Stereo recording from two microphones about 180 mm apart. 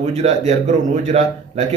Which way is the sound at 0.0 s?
40° right (ahead or behind).